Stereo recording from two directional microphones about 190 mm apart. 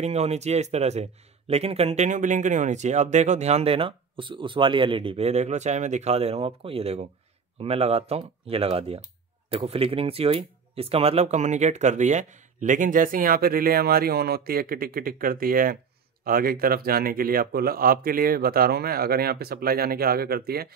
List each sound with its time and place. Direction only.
0.0 s speech: 35° right (ahead or behind); by 20.6 s 55° right (ahead or behind)